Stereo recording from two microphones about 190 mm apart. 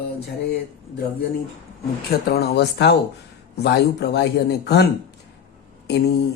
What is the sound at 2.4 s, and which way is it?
Speech, 60° left (ahead or behind).